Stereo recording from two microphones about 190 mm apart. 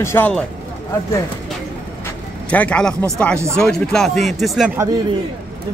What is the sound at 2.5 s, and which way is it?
Speech, 5° left (ahead or behind).